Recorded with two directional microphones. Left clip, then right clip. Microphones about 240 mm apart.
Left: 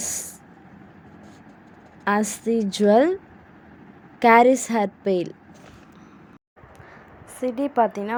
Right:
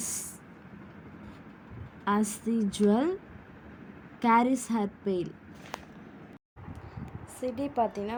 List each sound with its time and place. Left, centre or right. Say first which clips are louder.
0.0 s a sound: left 7 dB; left
2.0 s a woman's voice: left 7 dB; left
4.2 s a woman's voice: left 10 dB; left
7.3 s a woman's voice: left 8 dB; left